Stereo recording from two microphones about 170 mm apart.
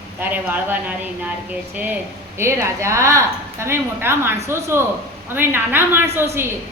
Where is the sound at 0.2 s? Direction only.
10° right (ahead or behind).